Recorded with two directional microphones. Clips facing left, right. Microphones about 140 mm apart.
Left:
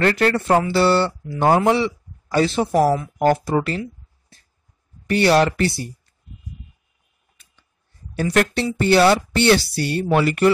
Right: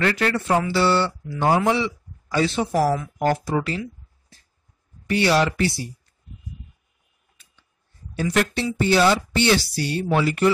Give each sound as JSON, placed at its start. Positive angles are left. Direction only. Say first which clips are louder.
{"t": 0.0, "sound": "speech", "louder": "left 4 dB", "side_deg": 45}
{"t": 2.7, "sound": "speech", "louder": "left 5 dB", "side_deg": 25}
{"t": 3.2, "sound": "speech", "louder": "left 4 dB", "side_deg": 50}
{"t": 5.0, "sound": "a woman's voice", "louder": "left 4 dB", "side_deg": 55}
{"t": 8.2, "sound": "a woman's voice", "louder": "left 3 dB", "side_deg": 55}